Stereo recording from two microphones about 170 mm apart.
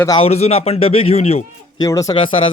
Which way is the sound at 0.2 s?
35° left (ahead or behind).